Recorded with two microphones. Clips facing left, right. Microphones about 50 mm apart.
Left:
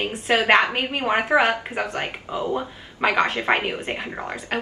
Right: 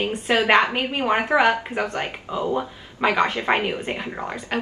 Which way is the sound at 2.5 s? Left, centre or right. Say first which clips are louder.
Right 1 dB; centre.